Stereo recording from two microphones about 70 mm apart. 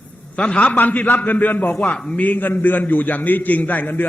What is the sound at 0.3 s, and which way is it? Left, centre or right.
A man's voice, centre.